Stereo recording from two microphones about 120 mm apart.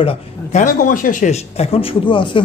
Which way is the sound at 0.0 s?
55° left (ahead or behind).